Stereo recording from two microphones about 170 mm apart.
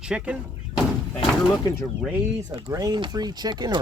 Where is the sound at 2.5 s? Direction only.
25° right (ahead or behind).